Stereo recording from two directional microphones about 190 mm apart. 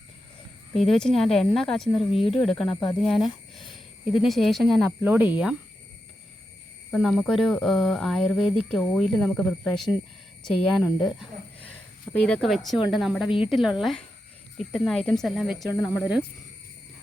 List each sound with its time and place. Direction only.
0.8 s speech: centre (ahead or behind)
6.9 s speech: centre (ahead or behind)
15.7 s speech: 15° left (ahead or behind)